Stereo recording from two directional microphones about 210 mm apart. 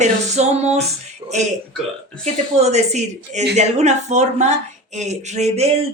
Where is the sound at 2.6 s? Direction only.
30° right (ahead or behind).